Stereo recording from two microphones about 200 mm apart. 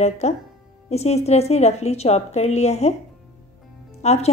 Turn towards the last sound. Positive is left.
turn(degrees=35)  # may be behind; listen again after turning